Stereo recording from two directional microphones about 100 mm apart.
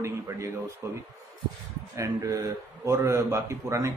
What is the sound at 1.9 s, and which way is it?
A man's voice, 35° right (ahead or behind).